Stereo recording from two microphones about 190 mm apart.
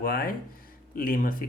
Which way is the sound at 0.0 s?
50° left (ahead or behind).